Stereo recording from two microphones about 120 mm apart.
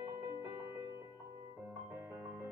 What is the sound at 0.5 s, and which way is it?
Music, 25° right (ahead or behind).